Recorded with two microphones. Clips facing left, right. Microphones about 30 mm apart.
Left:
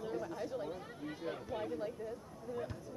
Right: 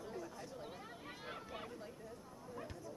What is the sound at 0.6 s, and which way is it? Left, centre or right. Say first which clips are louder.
Chatter: left 7 dB; centre.